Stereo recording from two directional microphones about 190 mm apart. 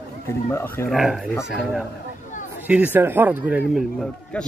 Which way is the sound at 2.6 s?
10° right (ahead or behind).